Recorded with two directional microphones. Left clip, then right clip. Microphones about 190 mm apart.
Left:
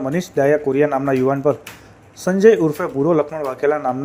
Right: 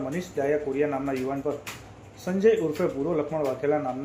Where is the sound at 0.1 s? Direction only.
35° left (ahead or behind).